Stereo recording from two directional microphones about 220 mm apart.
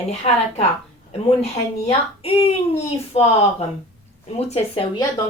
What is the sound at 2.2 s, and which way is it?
Speech, 25° left (ahead or behind).